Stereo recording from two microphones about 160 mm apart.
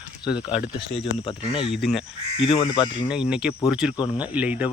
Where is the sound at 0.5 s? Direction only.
35° left (ahead or behind).